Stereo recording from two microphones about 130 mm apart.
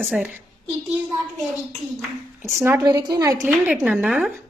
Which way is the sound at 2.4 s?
20° right (ahead or behind).